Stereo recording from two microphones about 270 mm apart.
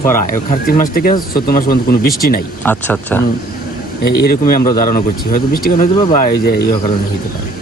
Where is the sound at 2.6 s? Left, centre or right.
Centre.